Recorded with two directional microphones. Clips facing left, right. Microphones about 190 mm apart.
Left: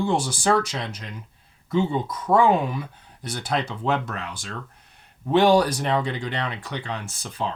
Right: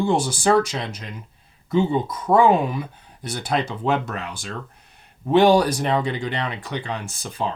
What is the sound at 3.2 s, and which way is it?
Speech, 10° right (ahead or behind).